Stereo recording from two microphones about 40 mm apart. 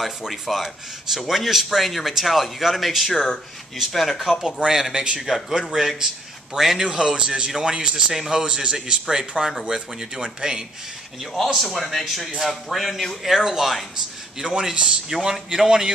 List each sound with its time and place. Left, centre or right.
0.3 s speech: centre
4.9 s speech: right
5.5 s speech: centre
7.0 s speech: right
8.1 s speech: centre
8.4 s speech: right
11.3 s speech: centre
14.4 s speech: centre